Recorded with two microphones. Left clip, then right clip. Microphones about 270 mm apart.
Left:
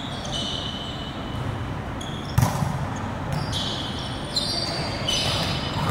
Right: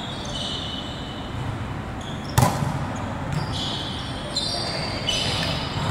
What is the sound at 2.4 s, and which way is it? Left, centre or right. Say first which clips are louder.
Basketball bounce: right 6 dB; right.